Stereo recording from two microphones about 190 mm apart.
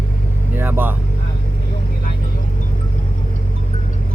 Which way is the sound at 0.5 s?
10° right (ahead or behind).